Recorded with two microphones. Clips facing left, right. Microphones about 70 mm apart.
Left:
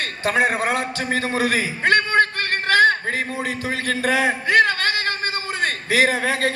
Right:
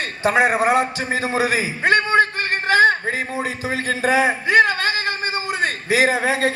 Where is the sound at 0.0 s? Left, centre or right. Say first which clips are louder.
Right 2 dB; right.